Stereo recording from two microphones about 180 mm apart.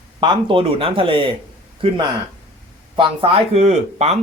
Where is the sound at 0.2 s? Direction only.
25° right (ahead or behind).